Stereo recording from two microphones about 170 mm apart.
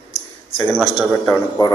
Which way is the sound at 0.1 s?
40° left (ahead or behind).